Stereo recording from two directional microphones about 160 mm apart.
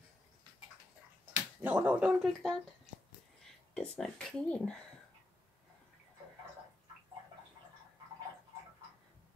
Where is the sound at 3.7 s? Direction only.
5° left (ahead or behind).